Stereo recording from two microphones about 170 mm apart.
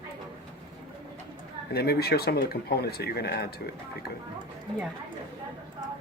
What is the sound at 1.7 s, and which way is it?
Speech, 70° left (ahead or behind).